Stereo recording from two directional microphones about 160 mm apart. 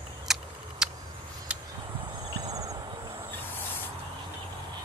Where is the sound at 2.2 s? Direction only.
20° right (ahead or behind).